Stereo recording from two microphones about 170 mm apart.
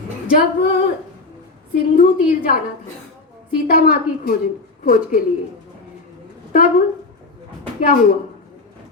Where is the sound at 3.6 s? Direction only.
60° left (ahead or behind).